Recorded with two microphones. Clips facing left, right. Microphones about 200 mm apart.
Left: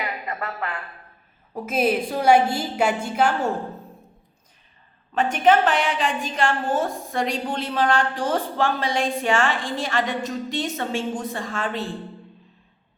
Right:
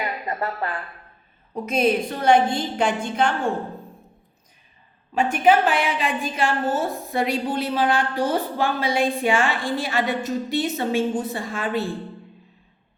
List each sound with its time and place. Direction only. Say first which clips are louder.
0.3 s a woman's voice: right 3 dB; 30° right (ahead or behind)
1.5 s a woman's voice: right 1 dB; 5° left (ahead or behind)
5.1 s a woman's voice: even; 10° right (ahead or behind)